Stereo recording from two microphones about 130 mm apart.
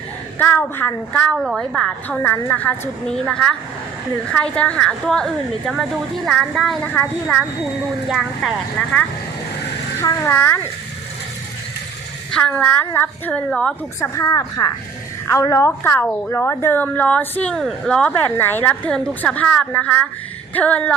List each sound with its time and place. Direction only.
0.3 s a woman's voice: 15° left (ahead or behind)
1.4 s a woman's voice: centre (ahead or behind)
2.0 s a woman's voice: 15° left (ahead or behind)
6.8 s a woman's voice: 15° left (ahead or behind)
8.1 s a woman's voice: centre (ahead or behind)
10.0 s a woman's voice: 15° left (ahead or behind)
12.3 s a woman's voice: 10° left (ahead or behind)
14.0 s a woman's voice: 25° left (ahead or behind); by 20.9 s 10° left (ahead or behind)